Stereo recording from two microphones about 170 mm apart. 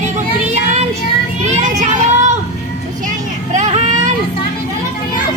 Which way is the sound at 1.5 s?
45° right (ahead or behind).